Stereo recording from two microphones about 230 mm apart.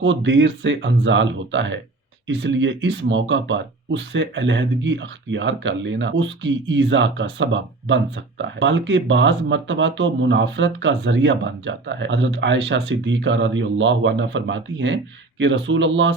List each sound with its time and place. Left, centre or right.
0.0 s speech: right